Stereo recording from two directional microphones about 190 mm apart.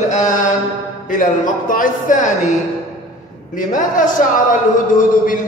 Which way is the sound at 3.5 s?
45° left (ahead or behind).